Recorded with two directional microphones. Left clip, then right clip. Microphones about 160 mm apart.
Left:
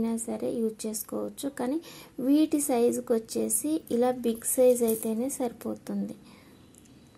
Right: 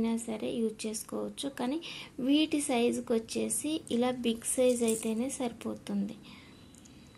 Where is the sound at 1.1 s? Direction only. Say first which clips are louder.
Left 4 dB; 25° left (ahead or behind).